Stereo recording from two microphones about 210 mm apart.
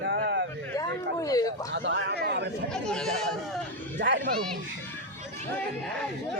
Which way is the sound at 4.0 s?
60° right (ahead or behind).